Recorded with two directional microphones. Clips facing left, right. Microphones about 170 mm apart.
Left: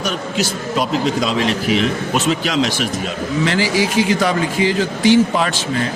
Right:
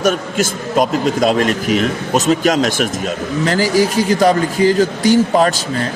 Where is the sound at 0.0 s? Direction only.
50° right (ahead or behind).